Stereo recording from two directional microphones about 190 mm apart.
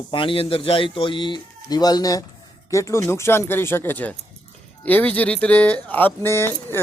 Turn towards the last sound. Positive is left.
turn(degrees=10)  # may be behind; listen again after turning